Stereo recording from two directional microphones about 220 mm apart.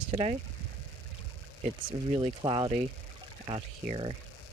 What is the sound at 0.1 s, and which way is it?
Speech, 30° right (ahead or behind).